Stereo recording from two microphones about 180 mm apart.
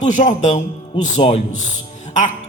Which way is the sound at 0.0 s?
40° left (ahead or behind).